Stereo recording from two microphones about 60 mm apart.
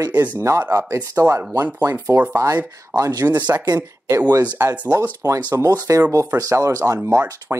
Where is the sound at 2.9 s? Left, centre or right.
Right.